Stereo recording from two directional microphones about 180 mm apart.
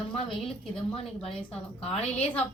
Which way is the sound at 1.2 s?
30° left (ahead or behind).